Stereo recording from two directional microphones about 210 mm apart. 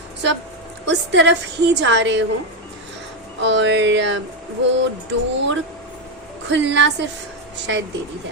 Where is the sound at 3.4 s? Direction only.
60° right (ahead or behind).